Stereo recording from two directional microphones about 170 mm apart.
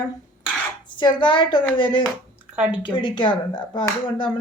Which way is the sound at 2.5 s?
5° right (ahead or behind).